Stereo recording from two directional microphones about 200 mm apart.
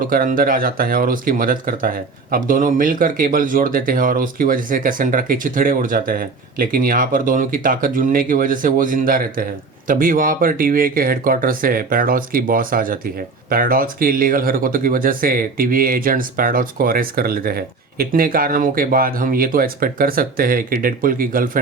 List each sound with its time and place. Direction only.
0.0 s speech: 45° right (ahead or behind)